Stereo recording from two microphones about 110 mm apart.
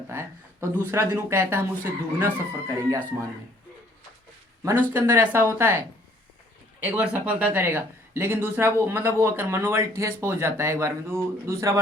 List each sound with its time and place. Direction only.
0.1 s speech: 20° right (ahead or behind)
4.6 s speech: 20° right (ahead or behind)
6.7 s speech: 10° right (ahead or behind)